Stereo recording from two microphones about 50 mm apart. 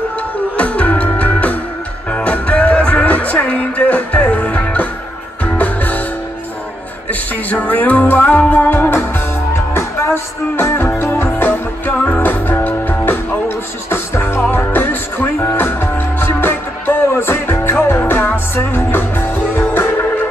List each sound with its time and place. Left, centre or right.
0.6 s music: left
7.1 s music: left
9.8 s music: left